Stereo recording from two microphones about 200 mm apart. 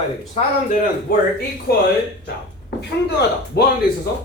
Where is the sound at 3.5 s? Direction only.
55° left (ahead or behind).